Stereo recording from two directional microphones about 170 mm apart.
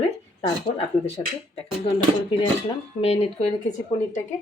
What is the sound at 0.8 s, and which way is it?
Speech, 35° left (ahead or behind).